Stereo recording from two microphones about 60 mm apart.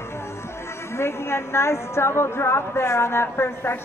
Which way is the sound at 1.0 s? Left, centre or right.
Left.